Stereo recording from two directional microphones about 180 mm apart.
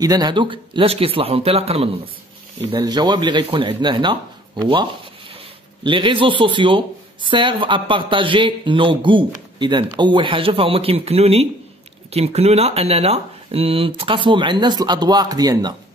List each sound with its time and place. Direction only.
0.0 s speech: 20° right (ahead or behind)
2.7 s a man's voice: 20° right (ahead or behind)
5.9 s a man's voice: 30° right (ahead or behind)